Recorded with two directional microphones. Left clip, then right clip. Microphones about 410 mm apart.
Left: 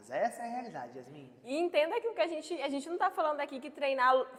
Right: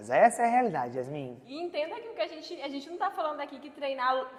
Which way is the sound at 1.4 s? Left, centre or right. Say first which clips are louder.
Left 5 dB; centre.